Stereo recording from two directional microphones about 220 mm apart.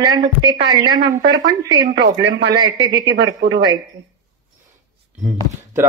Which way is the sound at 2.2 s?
50° right (ahead or behind).